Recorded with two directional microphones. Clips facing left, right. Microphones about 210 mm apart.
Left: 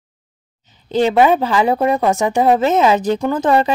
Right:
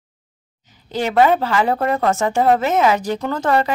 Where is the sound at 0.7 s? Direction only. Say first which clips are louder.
Left 4 dB; 20° left (ahead or behind).